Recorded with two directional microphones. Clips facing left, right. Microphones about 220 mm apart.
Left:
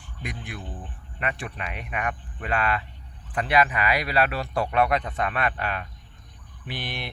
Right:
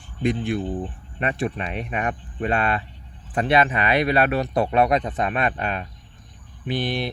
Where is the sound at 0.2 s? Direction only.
25° right (ahead or behind).